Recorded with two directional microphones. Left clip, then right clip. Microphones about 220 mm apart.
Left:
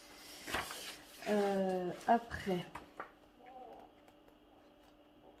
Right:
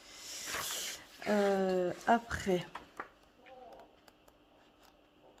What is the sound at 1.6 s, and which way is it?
A woman's voice, 50° right (ahead or behind).